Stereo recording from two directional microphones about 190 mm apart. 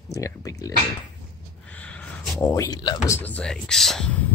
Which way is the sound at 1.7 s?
5° left (ahead or behind).